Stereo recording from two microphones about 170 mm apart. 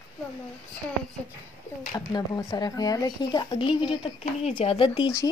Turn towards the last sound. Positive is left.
turn(degrees=30)  # may be behind; listen again after turning